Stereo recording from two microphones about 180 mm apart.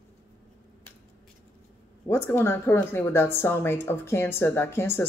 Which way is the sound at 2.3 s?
15° left (ahead or behind).